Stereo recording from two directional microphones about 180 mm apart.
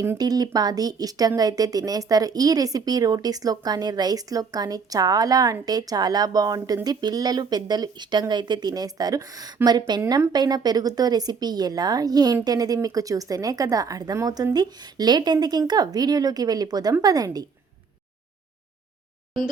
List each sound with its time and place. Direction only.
0.0 s speech: 20° right (ahead or behind)